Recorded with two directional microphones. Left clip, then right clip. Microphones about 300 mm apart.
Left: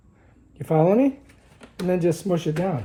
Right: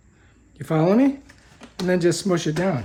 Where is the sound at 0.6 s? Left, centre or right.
Centre.